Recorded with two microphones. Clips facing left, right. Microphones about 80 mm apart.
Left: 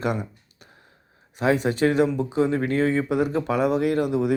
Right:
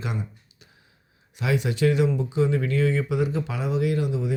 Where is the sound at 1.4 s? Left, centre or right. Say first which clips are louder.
Left 3 dB; left.